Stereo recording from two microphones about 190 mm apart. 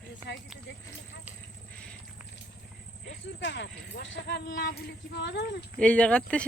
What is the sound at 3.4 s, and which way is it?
Snake, 65° left (ahead or behind).